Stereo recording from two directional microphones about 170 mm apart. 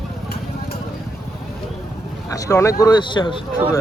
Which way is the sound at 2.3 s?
15° left (ahead or behind).